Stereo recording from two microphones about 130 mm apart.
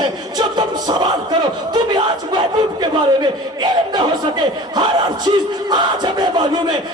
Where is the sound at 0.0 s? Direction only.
35° right (ahead or behind).